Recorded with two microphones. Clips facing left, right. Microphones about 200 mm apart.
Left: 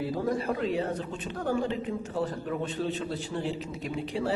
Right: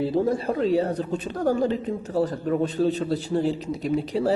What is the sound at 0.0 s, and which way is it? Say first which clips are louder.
A man's voice: right 6 dB; 30° right (ahead or behind).